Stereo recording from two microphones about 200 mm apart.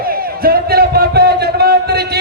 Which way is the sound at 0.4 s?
50° right (ahead or behind).